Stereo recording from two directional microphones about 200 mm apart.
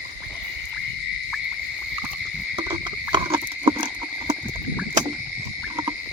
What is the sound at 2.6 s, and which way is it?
Insect, 25° right (ahead or behind).